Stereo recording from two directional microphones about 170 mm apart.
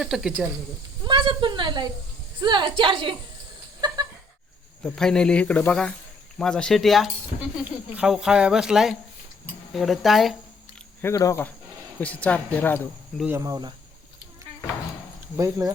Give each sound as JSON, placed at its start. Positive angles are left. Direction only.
{"t": 0.0, "sound": "speech", "side_deg": -5}
{"t": 1.0, "sound": "a woman's voice", "side_deg": -30}
{"t": 3.8, "sound": "a sound", "side_deg": -25}
{"t": 4.8, "sound": "speech", "side_deg": 5}
{"t": 11.0, "sound": "speech", "side_deg": 20}
{"t": 13.3, "sound": "a woman's voice", "side_deg": -20}
{"t": 15.4, "sound": "speech", "side_deg": -20}